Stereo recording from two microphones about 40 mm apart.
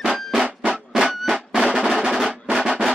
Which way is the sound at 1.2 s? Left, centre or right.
Centre.